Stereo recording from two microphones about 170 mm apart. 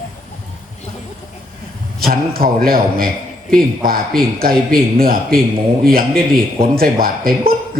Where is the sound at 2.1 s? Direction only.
60° right (ahead or behind).